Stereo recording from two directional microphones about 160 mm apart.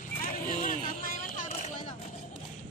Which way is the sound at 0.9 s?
55° left (ahead or behind).